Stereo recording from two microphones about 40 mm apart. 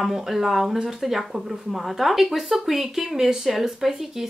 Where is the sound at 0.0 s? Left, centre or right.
Centre.